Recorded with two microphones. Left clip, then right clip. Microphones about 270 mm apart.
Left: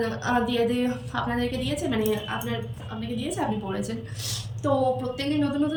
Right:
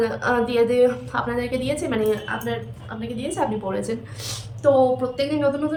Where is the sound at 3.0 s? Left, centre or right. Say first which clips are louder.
Right 5 dB; centre.